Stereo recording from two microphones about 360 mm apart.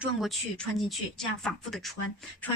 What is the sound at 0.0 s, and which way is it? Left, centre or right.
A woman's voice, centre.